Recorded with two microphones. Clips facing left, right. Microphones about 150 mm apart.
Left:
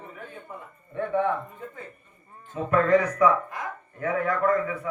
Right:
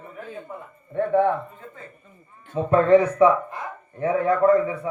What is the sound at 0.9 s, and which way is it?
Speech, 30° right (ahead or behind).